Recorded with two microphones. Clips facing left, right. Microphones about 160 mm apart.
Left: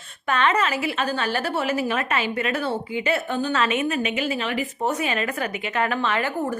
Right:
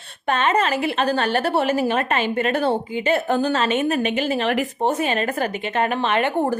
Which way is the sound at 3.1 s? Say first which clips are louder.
Right 5 dB; 45° right (ahead or behind).